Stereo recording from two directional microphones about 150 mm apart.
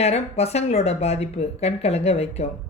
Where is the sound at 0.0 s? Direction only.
45° left (ahead or behind).